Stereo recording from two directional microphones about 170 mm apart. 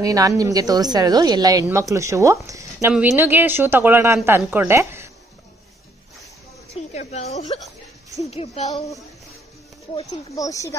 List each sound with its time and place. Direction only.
0.0 s speech: 20° right (ahead or behind)
6.7 s speech: 40° left (ahead or behind)
8.6 s speech: 20° left (ahead or behind)
10.1 s speech: 20° left (ahead or behind)